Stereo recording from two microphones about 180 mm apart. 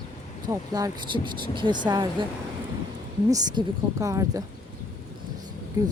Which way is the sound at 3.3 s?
20° right (ahead or behind).